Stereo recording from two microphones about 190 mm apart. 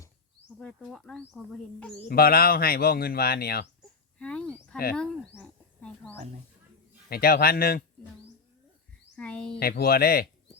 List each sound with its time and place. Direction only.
0.6 s speech: centre (ahead or behind)
2.0 s speech: 55° left (ahead or behind)
4.2 s speech: 5° left (ahead or behind)
7.1 s speech: 55° left (ahead or behind)
9.1 s a child's voice: 5° left (ahead or behind)
9.6 s speech: 55° left (ahead or behind)